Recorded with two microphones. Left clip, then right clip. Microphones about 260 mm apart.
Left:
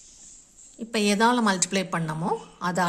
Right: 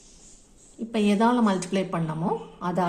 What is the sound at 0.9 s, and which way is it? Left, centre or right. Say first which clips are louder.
A woman's voice: left 1 dB; left.